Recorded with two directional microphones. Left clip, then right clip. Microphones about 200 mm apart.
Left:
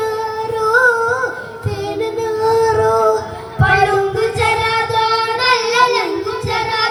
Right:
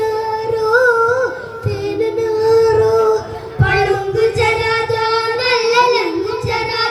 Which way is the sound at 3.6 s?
15° left (ahead or behind).